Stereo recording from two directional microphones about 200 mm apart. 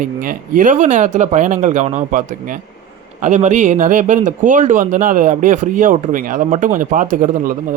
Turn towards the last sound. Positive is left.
turn(degrees=-40)  # may be behind; listen again after turning